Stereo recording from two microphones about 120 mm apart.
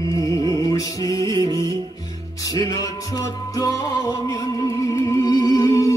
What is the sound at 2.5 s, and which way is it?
Music, 30° left (ahead or behind).